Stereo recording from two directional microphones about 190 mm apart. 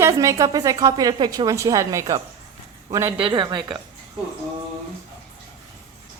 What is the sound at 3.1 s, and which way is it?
Speech, 25° right (ahead or behind).